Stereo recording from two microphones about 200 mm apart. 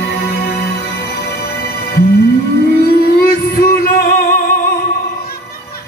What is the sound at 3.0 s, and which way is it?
Music, 50° left (ahead or behind).